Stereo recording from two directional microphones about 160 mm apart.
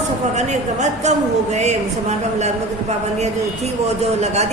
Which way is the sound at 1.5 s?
45° right (ahead or behind).